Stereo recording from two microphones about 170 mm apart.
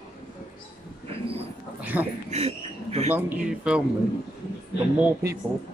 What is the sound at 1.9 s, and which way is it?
Speech, 10° right (ahead or behind).